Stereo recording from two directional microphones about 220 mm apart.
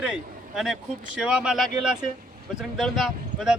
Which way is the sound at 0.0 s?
5° right (ahead or behind).